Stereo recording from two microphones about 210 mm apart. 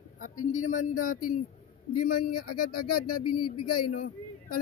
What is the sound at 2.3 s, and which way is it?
Speech, 90° left.